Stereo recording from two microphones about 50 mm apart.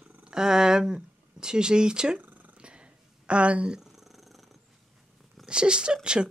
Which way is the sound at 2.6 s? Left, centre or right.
Right.